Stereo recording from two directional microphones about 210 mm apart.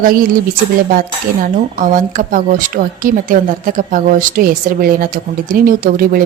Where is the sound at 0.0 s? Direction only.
40° right (ahead or behind).